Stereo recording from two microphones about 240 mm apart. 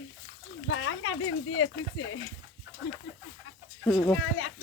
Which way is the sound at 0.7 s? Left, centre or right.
Left.